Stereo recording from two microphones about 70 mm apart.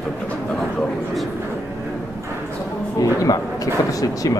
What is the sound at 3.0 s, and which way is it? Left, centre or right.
A man's voice, left.